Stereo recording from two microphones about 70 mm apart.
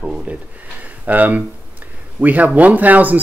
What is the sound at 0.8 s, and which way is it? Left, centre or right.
Speech, right.